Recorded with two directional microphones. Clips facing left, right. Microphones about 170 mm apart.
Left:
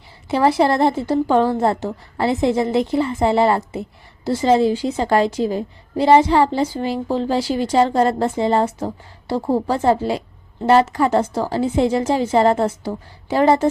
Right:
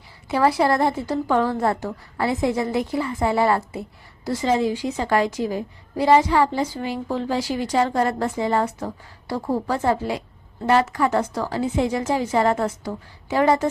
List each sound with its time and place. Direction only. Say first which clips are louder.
0.3 s a woman's voice: left 3 dB; 25° left (ahead or behind)